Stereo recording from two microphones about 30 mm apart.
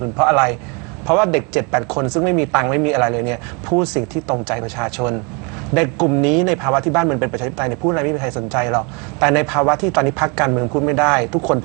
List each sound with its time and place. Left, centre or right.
0.2 s speech: centre